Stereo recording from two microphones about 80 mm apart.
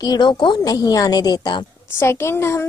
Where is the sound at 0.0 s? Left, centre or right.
Left.